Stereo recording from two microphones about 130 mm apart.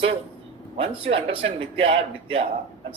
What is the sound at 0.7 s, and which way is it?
Speech, 45° right (ahead or behind).